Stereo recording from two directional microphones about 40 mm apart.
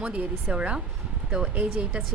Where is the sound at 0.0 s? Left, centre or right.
Right.